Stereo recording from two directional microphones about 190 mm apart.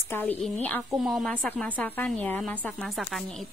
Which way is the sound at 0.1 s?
10° left (ahead or behind).